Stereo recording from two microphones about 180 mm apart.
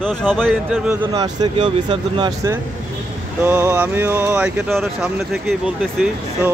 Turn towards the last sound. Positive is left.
turn(degrees=-5)  # may be behind; listen again after turning